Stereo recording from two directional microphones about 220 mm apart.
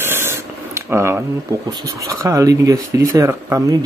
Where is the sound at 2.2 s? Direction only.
15° right (ahead or behind).